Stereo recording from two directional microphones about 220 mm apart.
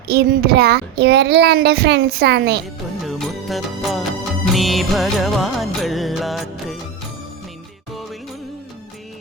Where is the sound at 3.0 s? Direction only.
Centre (ahead or behind).